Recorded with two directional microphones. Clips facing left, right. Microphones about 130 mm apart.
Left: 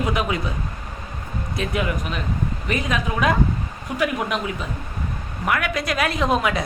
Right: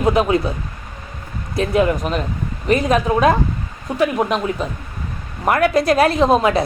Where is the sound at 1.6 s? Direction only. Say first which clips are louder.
Right 9 dB; 35° right (ahead or behind).